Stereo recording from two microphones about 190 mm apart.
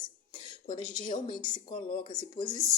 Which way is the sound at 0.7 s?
25° left (ahead or behind).